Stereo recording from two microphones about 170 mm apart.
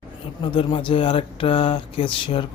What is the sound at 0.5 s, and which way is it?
Speech, 30° left (ahead or behind).